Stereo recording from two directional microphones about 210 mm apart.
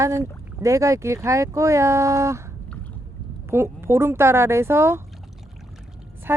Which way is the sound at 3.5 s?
10° right (ahead or behind).